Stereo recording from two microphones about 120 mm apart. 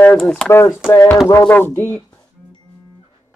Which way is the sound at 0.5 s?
20° left (ahead or behind).